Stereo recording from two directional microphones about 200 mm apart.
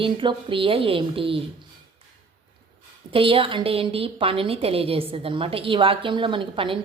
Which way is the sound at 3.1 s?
25° right (ahead or behind).